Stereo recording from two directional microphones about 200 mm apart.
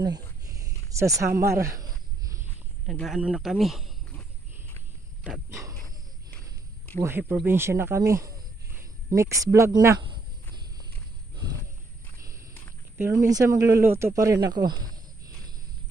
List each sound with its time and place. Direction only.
0.5 s a sound: 15° right (ahead or behind)
2.9 s speech: centre (ahead or behind)
5.2 s dog: centre (ahead or behind)
5.6 s dog: 15° right (ahead or behind)
7.0 s speech: 10° right (ahead or behind)
12.9 s speech: 15° right (ahead or behind)